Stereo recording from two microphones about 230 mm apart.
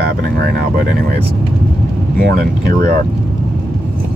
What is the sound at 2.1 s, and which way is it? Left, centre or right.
Speech, right.